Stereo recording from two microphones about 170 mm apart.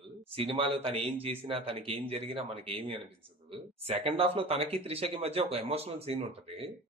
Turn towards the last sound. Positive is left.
turn(degrees=-35)  # may be behind; listen again after turning